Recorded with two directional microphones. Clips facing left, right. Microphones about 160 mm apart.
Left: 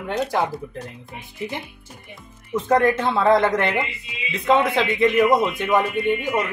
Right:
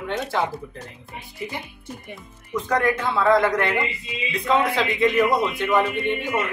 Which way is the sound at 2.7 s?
25° left (ahead or behind).